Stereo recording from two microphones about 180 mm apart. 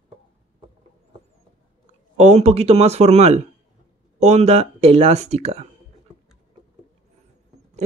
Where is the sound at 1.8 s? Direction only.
40° right (ahead or behind).